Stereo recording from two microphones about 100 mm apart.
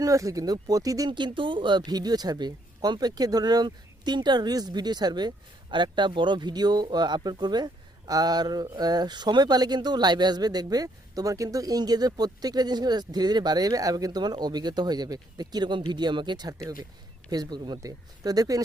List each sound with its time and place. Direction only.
0.0 s speech: 35° right (ahead or behind)
1.1 s speech: 55° right (ahead or behind)